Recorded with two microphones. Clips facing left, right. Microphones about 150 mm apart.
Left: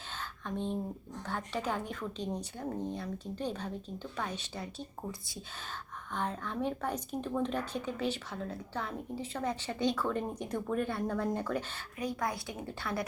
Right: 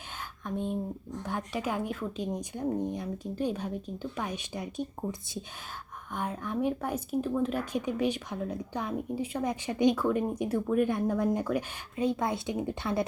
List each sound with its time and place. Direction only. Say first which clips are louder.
0.2 s a sound: right 3 dB; 10° right (ahead or behind)
1.2 s speech: right 2 dB; 15° right (ahead or behind)
6.1 s speech: right 3 dB; 10° right (ahead or behind)
11.9 s a woman's voice: right 6 dB; 25° right (ahead or behind)